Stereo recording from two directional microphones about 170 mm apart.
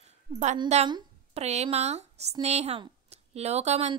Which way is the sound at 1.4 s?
40° right (ahead or behind).